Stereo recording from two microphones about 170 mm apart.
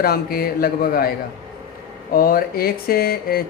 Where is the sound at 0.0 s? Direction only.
65° left (ahead or behind).